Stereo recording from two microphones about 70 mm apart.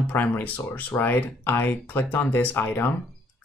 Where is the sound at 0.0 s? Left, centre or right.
Left.